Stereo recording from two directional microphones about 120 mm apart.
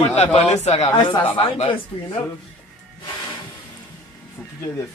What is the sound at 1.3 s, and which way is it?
Speech, 45° left (ahead or behind).